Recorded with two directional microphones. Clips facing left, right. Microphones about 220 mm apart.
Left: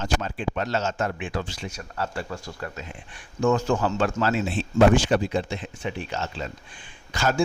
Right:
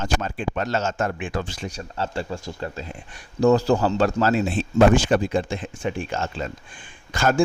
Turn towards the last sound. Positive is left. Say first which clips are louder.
# right 3 dB
turn(degrees=-50)  # may be behind; listen again after turning